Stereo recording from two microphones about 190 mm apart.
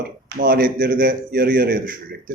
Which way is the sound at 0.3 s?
50° right (ahead or behind).